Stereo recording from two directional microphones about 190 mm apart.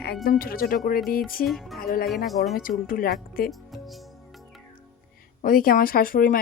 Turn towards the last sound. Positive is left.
turn(degrees=45)  # may be behind; listen again after turning